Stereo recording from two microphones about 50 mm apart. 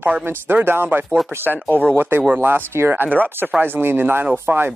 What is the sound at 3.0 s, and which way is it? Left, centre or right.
Speech, right.